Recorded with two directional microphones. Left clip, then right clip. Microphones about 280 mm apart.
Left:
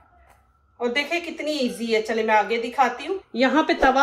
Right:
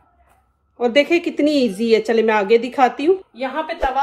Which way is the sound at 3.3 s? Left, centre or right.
Left.